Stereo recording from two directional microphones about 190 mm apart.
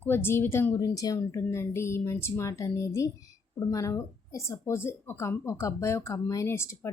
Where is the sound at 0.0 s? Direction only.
10° left (ahead or behind).